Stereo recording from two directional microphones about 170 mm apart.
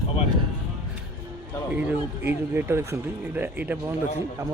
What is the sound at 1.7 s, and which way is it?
Speech, 10° right (ahead or behind).